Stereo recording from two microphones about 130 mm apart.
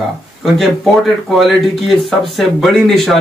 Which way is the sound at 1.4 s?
Centre (ahead or behind).